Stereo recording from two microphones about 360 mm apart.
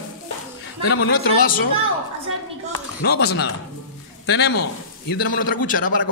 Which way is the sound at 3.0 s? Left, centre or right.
Left.